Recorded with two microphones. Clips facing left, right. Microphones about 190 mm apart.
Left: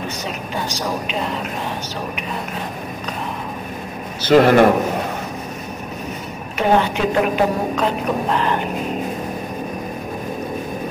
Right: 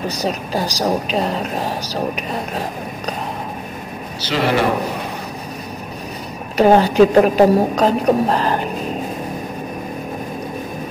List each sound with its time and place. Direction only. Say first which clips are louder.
0.2 s a woman's voice: right 5 dB; 35° right (ahead or behind)
4.2 s a man's voice: left 7 dB; 50° left (ahead or behind)
6.5 s a woman's voice: right 5 dB; 35° right (ahead or behind)